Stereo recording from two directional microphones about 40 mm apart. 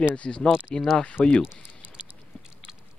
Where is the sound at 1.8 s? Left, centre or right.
Right.